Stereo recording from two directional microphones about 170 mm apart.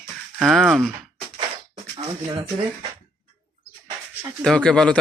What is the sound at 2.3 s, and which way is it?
Speech, 25° right (ahead or behind).